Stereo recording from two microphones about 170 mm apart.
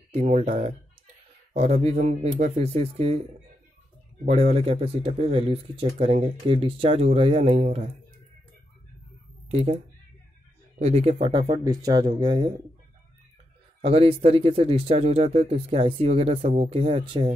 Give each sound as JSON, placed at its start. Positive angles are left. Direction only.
{"t": 0.1, "sound": "speech", "side_deg": -40}
{"t": 4.3, "sound": "speech", "side_deg": -35}
{"t": 9.5, "sound": "speech", "side_deg": -35}
{"t": 10.8, "sound": "speech", "side_deg": -40}
{"t": 11.3, "sound": "speech", "side_deg": -25}
{"t": 13.8, "sound": "speech", "side_deg": -35}